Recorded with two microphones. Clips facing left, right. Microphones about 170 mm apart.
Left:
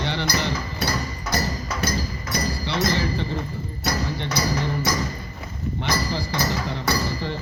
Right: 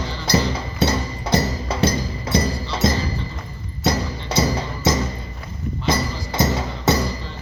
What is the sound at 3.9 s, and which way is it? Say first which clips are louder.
Music: right 4 dB; 25° right (ahead or behind).